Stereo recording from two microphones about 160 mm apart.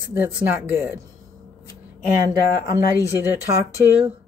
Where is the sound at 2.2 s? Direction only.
25° right (ahead or behind).